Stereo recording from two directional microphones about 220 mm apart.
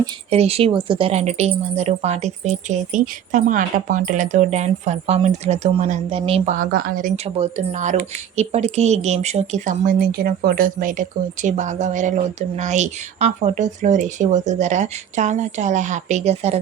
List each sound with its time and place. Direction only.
0.3 s a woman's voice: 30° right (ahead or behind)